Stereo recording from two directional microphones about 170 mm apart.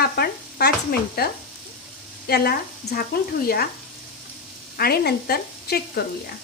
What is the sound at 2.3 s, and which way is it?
Speech, 65° left (ahead or behind).